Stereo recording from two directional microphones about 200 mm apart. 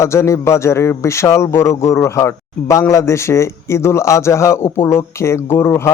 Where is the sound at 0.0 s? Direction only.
15° left (ahead or behind).